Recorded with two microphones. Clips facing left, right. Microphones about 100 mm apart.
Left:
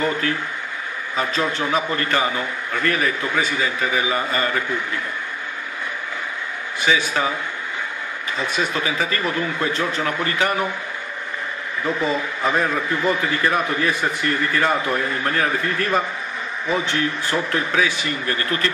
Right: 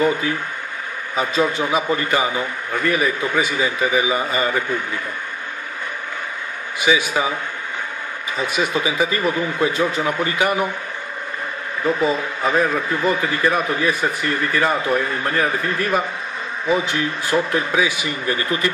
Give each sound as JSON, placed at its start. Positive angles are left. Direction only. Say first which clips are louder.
{"t": 1.1, "sound": "a man's voice", "louder": "right 3 dB", "side_deg": -10}
{"t": 6.8, "sound": "a man's voice", "louder": "right 2 dB", "side_deg": -10}
{"t": 8.4, "sound": "a man's voice", "louder": "right 2 dB", "side_deg": -10}
{"t": 11.8, "sound": "a man's voice", "louder": "right 3 dB", "side_deg": -5}